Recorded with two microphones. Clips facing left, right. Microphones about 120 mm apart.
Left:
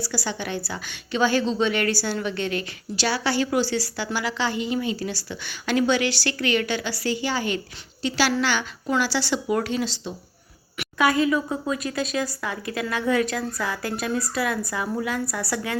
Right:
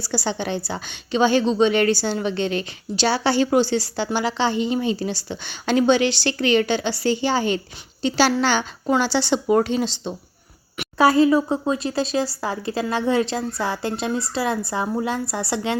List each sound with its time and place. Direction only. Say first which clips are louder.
0.0 s a woman's voice: right 4 dB; 25° right (ahead or behind)